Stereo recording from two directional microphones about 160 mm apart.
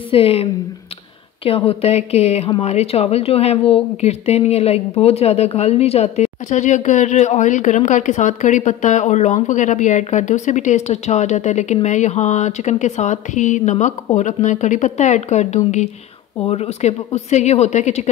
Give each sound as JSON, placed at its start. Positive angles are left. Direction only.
{"t": 0.1, "sound": "a woman's voice", "side_deg": 35}